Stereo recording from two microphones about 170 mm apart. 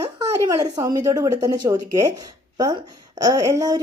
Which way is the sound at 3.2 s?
20° right (ahead or behind).